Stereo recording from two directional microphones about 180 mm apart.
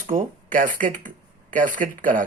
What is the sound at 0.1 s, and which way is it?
Speech, 45° right (ahead or behind).